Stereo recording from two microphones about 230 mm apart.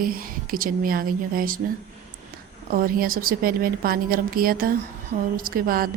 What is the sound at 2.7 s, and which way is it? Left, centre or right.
A woman's voice, right.